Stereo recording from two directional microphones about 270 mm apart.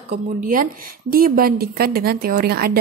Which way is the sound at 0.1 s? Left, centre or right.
Right.